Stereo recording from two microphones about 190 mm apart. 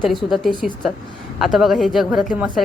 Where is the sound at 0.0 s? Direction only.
Centre (ahead or behind).